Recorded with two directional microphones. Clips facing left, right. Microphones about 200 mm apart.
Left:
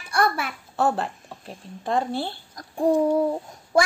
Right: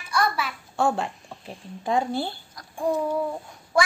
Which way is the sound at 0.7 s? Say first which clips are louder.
Left 1 dB; centre (ahead or behind).